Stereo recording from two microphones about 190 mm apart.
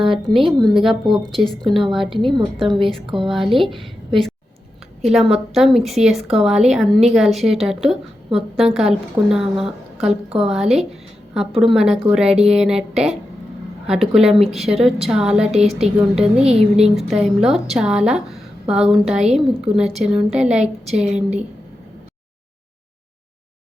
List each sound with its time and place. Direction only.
0.3 s speech: 25° right (ahead or behind)
0.6 s a woman's voice: centre (ahead or behind)
16.4 s speech: 35° right (ahead or behind)
16.9 s a woman's voice: centre (ahead or behind)